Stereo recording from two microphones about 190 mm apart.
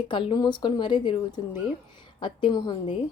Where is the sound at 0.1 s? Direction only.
25° left (ahead or behind).